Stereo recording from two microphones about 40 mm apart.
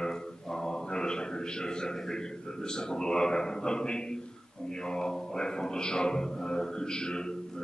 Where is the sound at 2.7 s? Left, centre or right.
Centre.